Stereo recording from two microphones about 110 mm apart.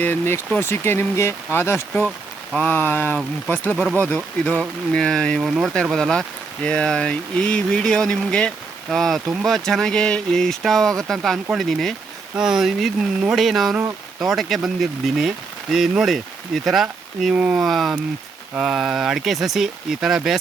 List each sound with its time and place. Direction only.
0.0 s speech: 20° left (ahead or behind)
5.4 s speech: 5° right (ahead or behind)